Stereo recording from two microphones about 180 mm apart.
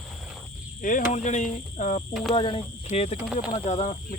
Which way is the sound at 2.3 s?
30° left (ahead or behind).